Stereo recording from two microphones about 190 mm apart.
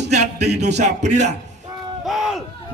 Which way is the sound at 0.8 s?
40° right (ahead or behind).